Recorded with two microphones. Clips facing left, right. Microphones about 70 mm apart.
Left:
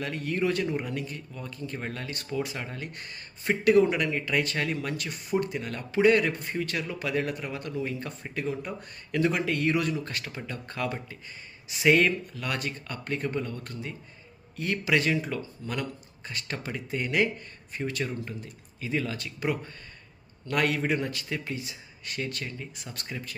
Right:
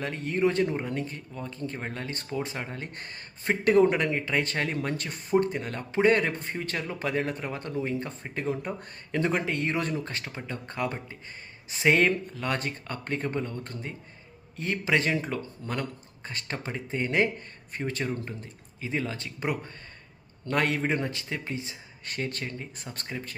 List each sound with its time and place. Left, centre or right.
0.0 s speech: right
17.7 s speech: right